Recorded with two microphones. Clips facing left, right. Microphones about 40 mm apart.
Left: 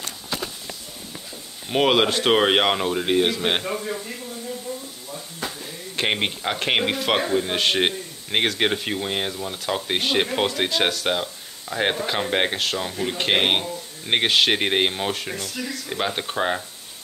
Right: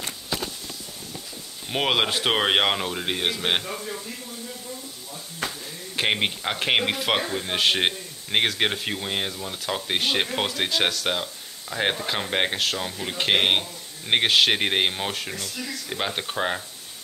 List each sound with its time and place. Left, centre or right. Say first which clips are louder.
1.7 s speech: left 4 dB; centre
5.9 s speech: even; centre
15.3 s speech: left 3 dB; left
15.9 s speech: left 2 dB; centre